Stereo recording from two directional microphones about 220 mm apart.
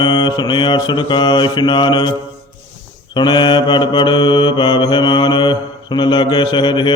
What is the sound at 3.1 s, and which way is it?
Mantra, 20° left (ahead or behind).